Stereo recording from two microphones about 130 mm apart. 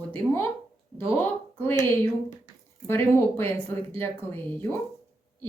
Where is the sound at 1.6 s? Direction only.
15° left (ahead or behind).